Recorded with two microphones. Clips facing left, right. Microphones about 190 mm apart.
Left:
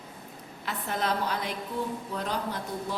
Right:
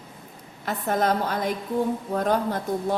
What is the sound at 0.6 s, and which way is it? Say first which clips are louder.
A man's voice: right 7 dB; 45° right (ahead or behind).